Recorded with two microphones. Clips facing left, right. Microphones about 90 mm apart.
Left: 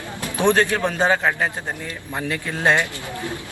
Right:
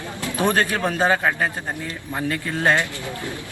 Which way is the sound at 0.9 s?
10° right (ahead or behind).